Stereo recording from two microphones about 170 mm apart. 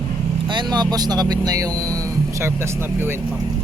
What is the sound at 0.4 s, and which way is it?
Speech, 25° right (ahead or behind).